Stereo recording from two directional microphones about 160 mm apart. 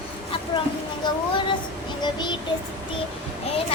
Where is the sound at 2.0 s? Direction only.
25° left (ahead or behind).